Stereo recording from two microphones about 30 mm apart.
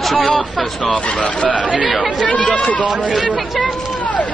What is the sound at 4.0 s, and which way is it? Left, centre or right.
Run, left.